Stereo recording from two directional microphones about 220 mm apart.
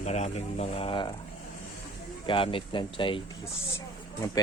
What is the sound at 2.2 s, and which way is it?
Speech, 25° left (ahead or behind).